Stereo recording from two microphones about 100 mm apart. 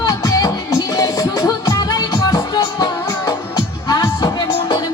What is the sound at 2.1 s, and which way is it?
Music, 60° left (ahead or behind).